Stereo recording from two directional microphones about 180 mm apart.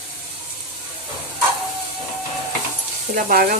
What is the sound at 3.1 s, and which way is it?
Speech, 50° right (ahead or behind).